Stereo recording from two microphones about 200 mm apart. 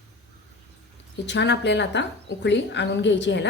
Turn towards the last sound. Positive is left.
turn(degrees=60)  # may be behind; listen again after turning